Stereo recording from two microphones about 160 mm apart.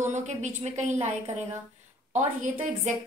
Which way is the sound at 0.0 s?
50° right (ahead or behind).